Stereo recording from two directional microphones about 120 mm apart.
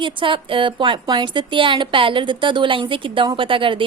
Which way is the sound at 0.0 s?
45° right (ahead or behind).